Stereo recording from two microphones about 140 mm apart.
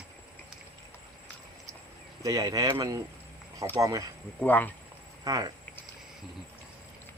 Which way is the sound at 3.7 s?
25° right (ahead or behind).